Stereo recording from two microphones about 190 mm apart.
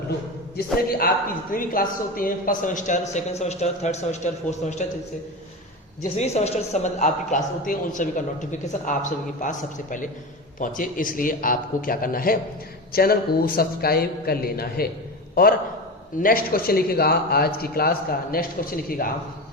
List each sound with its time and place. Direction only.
0.5 s a man's voice: 50° left (ahead or behind)
6.0 s a man's voice: 35° left (ahead or behind)